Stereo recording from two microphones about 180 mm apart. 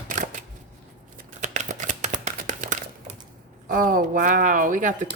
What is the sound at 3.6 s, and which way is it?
Speech, 50° right (ahead or behind).